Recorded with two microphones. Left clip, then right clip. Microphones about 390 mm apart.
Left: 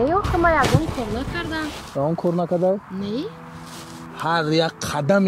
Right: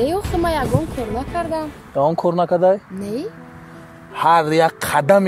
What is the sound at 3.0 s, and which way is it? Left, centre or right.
Speech, centre.